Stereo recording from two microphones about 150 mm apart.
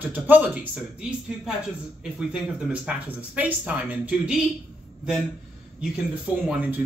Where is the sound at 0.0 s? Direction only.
10° right (ahead or behind).